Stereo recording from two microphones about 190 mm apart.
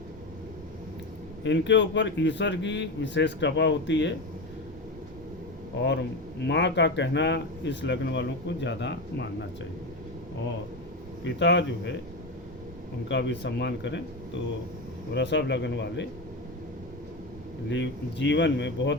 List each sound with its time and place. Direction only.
1.5 s speech: 70° left (ahead or behind)
5.8 s speech: 65° left (ahead or behind)
11.2 s speech: 70° left (ahead or behind)
13.1 s speech: 70° left (ahead or behind)
15.1 s speech: 65° left (ahead or behind)
17.7 s speech: 70° left (ahead or behind)